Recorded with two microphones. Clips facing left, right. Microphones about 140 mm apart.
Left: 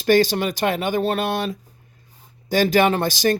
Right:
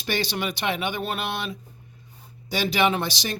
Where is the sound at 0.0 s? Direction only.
45° left (ahead or behind).